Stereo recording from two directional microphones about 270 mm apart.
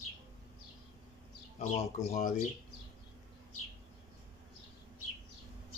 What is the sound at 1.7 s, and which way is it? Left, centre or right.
Speech, left.